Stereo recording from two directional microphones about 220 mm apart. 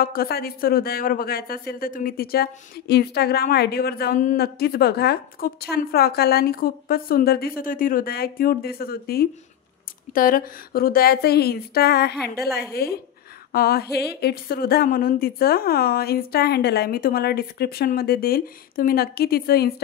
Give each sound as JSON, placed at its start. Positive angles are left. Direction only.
{"t": 0.0, "sound": "speech", "side_deg": 40}
{"t": 13.5, "sound": "a sound", "side_deg": 45}
{"t": 13.9, "sound": "speech", "side_deg": 45}